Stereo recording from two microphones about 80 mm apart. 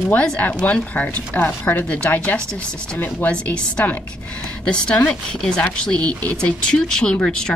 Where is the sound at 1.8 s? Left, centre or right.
Centre.